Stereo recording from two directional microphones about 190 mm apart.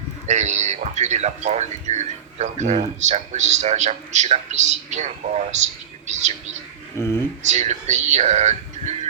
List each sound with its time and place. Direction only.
0.3 s speech: 35° right (ahead or behind)
7.0 s speech: 15° left (ahead or behind)
7.4 s speech: 35° right (ahead or behind)